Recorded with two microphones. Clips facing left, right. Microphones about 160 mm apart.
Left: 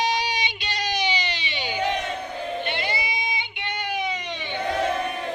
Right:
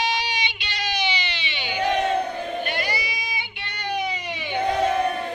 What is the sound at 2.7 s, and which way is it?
Crowd, 25° left (ahead or behind).